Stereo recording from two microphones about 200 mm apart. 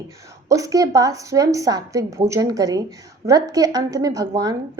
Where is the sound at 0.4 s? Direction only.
15° right (ahead or behind).